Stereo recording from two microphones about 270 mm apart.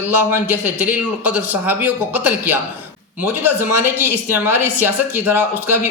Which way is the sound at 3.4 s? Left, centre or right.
Centre.